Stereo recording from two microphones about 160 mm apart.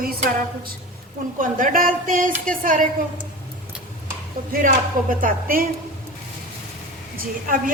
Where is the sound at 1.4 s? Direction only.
55° right (ahead or behind).